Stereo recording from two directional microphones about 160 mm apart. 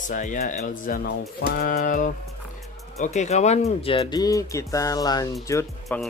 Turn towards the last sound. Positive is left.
turn(degrees=10)  # may be behind; listen again after turning